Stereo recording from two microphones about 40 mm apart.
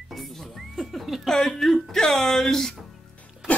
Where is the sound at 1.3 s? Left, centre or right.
Centre.